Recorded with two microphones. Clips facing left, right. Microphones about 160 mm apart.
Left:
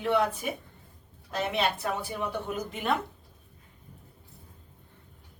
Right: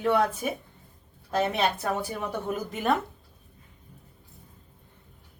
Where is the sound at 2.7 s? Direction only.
45° right (ahead or behind).